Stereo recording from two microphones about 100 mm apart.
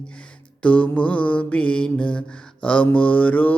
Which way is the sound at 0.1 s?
15° left (ahead or behind).